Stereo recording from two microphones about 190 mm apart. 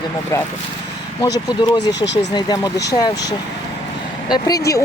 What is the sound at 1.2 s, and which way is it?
Speech, 20° left (ahead or behind).